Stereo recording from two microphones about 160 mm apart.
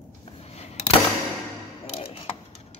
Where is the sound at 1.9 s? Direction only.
40° left (ahead or behind).